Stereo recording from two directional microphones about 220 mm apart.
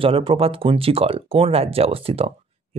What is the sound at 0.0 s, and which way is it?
Speech, 25° right (ahead or behind).